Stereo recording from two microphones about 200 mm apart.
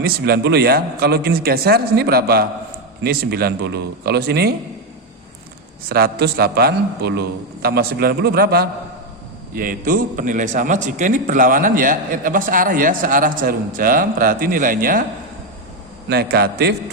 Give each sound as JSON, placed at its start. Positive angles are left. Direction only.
{"t": 0.0, "sound": "a man's voice", "side_deg": -55}
{"t": 5.9, "sound": "a man's voice", "side_deg": -55}
{"t": 16.0, "sound": "a man's voice", "side_deg": -55}